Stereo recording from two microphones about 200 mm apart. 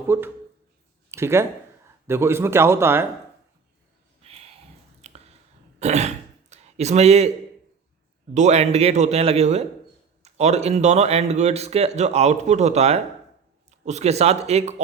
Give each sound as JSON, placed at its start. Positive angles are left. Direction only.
{"t": 0.1, "sound": "speech", "side_deg": -10}
{"t": 4.2, "sound": "a sound", "side_deg": -30}
{"t": 5.8, "sound": "throat clearing", "side_deg": -35}
{"t": 8.3, "sound": "speech", "side_deg": -35}